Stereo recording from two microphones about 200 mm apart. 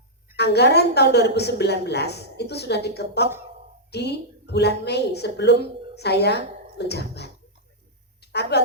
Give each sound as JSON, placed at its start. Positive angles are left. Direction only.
{"t": 0.3, "sound": "a woman's voice", "side_deg": 55}